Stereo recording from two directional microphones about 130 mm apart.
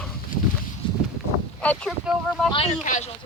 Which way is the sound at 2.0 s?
Centre (ahead or behind).